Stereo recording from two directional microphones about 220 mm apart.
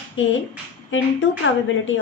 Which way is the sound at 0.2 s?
60° left (ahead or behind).